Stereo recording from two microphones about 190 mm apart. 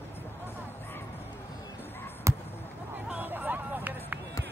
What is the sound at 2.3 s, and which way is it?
Basketball bounce, 15° right (ahead or behind).